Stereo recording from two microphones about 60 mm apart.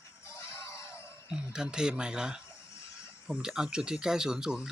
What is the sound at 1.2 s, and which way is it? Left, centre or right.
Speech, centre.